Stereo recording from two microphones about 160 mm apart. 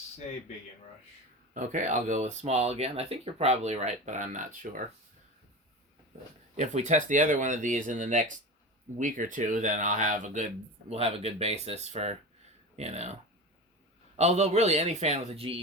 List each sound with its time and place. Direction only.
1.5 s speech: 50° right (ahead or behind)
6.6 s speech: 45° right (ahead or behind)
14.2 s speech: 45° right (ahead or behind)